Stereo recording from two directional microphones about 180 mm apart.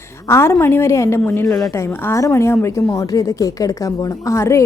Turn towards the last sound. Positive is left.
turn(degrees=15)  # may be behind; listen again after turning